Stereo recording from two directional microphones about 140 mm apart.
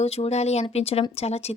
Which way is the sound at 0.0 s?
50° left (ahead or behind).